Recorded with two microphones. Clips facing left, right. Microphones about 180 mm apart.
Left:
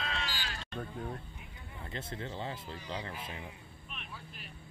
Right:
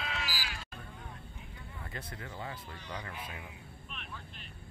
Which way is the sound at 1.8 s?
25° left (ahead or behind).